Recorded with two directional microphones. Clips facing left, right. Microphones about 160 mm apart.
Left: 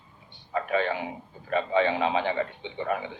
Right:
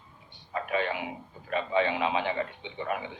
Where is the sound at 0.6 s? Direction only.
35° left (ahead or behind).